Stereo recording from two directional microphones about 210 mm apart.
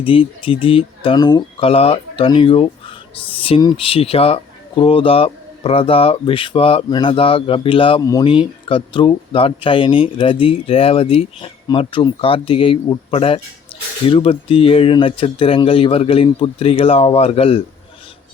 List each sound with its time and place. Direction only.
0.0 s speech: 25° left (ahead or behind)